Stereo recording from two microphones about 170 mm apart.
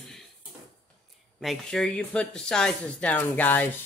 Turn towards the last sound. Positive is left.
turn(degrees=10)  # may be behind; listen again after turning